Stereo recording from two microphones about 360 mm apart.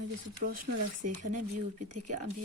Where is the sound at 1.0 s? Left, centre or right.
Right.